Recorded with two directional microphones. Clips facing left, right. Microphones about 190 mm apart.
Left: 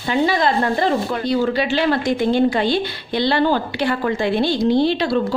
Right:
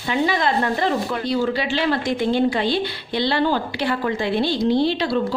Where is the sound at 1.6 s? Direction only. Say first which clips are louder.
Left 3 dB; 45° left (ahead or behind).